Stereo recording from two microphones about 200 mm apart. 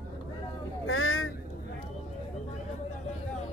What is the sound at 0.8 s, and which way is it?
Vehicle, 90° left.